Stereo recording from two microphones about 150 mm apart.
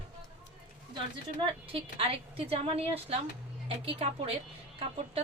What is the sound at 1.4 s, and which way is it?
Speech, 35° right (ahead or behind).